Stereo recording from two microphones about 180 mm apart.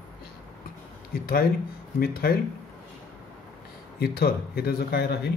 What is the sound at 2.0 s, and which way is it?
Speech, 55° left (ahead or behind).